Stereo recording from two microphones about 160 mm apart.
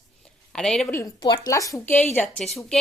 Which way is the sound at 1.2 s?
30° left (ahead or behind).